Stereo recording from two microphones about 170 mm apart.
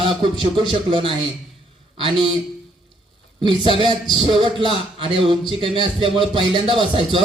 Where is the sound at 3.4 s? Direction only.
30° right (ahead or behind).